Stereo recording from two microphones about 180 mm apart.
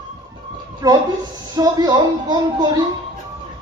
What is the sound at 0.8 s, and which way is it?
Speech, 20° right (ahead or behind).